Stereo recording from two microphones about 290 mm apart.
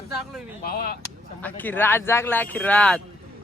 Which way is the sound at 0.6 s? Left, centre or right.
Left.